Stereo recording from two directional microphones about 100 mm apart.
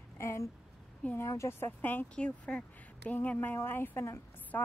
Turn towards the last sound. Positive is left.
turn(degrees=20)  # may be behind; listen again after turning